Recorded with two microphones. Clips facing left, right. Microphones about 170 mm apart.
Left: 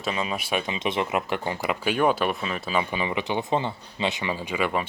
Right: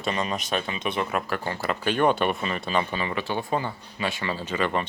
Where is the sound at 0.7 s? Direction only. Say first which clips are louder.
Left 2 dB; 20° left (ahead or behind).